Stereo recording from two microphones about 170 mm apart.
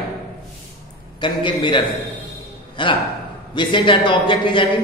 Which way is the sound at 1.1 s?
30° left (ahead or behind).